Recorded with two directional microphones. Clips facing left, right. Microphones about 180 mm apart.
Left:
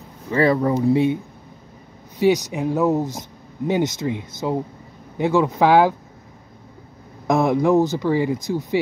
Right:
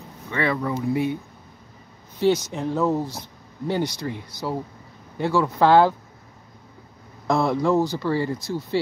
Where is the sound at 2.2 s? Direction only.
15° left (ahead or behind).